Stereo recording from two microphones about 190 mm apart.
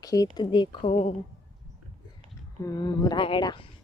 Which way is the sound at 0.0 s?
20° left (ahead or behind).